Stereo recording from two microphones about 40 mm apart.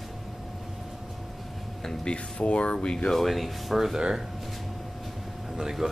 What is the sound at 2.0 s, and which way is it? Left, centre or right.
Speech, left.